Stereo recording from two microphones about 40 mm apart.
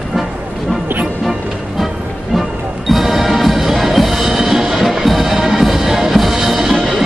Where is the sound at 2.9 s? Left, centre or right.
Centre.